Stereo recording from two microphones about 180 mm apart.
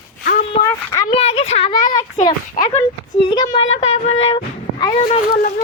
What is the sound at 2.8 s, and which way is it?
Speech, 25° left (ahead or behind).